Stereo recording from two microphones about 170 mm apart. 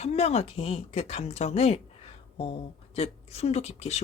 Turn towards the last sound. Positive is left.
turn(degrees=40)  # may be behind; listen again after turning